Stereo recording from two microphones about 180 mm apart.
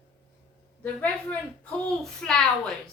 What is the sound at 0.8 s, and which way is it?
A woman's voice, 10° left (ahead or behind).